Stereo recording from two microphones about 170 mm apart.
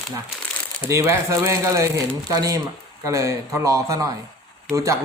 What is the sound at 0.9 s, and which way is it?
Speech, 15° right (ahead or behind).